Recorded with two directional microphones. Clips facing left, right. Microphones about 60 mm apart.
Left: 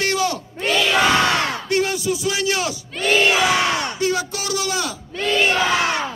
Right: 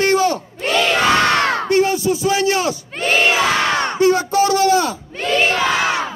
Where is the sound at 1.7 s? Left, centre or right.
Right.